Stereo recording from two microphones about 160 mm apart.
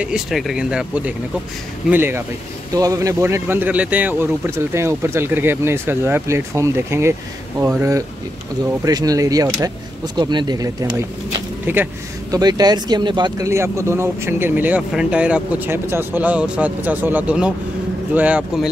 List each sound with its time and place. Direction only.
0.0 s speech: 5° right (ahead or behind)
8.8 s speech: 20° right (ahead or behind)
12.3 s speech: 25° right (ahead or behind)